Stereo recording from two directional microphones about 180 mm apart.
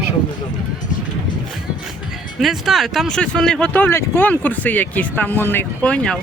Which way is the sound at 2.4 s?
Centre (ahead or behind).